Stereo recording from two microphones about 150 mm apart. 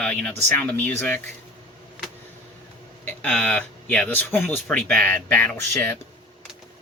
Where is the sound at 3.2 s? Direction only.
10° left (ahead or behind).